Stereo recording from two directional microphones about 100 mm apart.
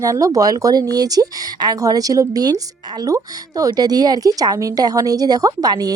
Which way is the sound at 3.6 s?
40° right (ahead or behind).